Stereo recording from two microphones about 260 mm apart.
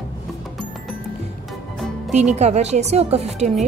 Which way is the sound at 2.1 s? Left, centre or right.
Right.